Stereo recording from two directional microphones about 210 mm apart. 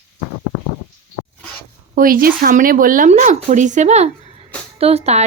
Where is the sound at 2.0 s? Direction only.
45° right (ahead or behind).